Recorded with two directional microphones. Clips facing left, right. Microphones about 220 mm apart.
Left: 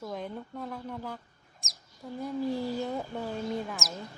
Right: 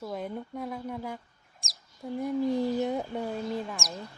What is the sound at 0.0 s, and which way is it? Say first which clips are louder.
A woman's voice: right 2 dB; 5° right (ahead or behind).